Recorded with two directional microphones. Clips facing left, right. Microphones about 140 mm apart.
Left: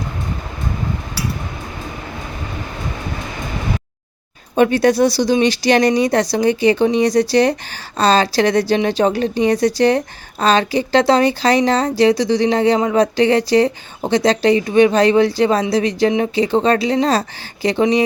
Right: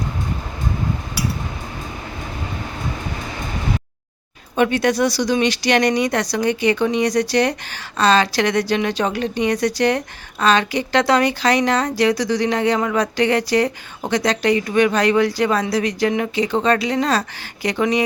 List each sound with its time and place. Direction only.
4.5 s speech: 35° left (ahead or behind)